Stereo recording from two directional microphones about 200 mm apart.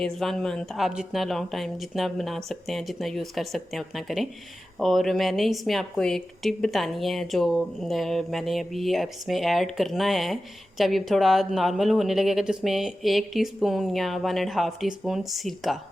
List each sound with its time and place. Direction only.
0.0 s a woman's voice: centre (ahead or behind)